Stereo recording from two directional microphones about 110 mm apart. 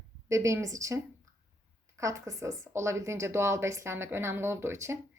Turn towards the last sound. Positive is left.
turn(degrees=-25)  # may be behind; listen again after turning